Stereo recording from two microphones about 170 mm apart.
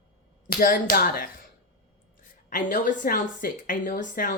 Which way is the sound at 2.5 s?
50° left (ahead or behind).